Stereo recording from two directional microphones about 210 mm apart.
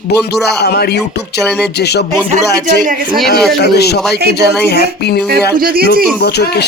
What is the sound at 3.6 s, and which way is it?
Speech, 50° left (ahead or behind).